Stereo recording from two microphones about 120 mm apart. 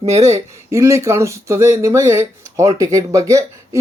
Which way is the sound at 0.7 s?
25° right (ahead or behind).